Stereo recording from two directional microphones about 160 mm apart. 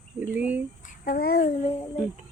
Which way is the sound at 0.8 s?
65° left (ahead or behind).